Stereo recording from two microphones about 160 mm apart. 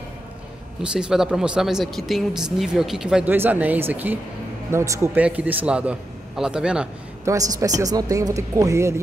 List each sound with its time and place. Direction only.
0.8 s a man's voice: 5° right (ahead or behind)
7.2 s speech: 20° right (ahead or behind)